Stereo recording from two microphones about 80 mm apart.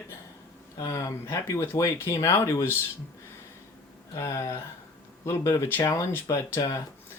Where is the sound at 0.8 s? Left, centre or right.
Left.